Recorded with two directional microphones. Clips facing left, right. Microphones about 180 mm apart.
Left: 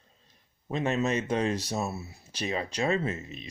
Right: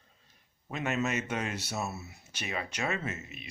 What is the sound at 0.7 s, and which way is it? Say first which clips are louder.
Speech: left 4 dB; 30° left (ahead or behind).